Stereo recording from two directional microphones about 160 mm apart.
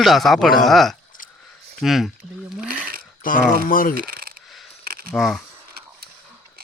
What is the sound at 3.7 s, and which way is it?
Speech, 60° left (ahead or behind).